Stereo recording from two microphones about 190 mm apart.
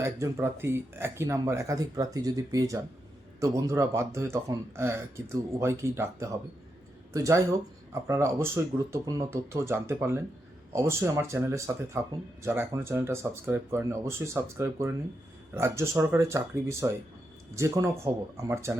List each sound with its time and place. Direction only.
0.0 s speech: 15° right (ahead or behind)